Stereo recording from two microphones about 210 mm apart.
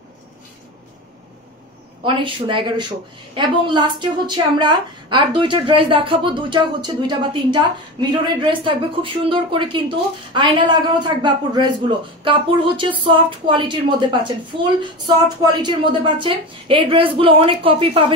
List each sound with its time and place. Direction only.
2.0 s speech: 25° right (ahead or behind)